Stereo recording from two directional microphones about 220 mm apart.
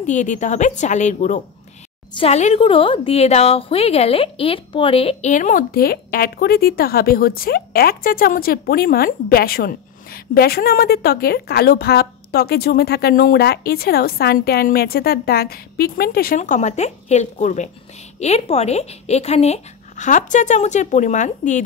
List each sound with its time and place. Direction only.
0.0 s a woman's voice: 35° left (ahead or behind)